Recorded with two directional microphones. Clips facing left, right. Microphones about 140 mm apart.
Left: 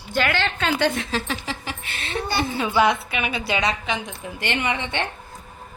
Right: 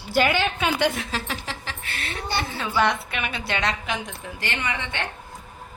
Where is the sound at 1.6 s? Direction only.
20° left (ahead or behind).